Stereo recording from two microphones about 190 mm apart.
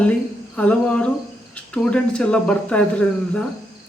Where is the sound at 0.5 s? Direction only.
5° left (ahead or behind).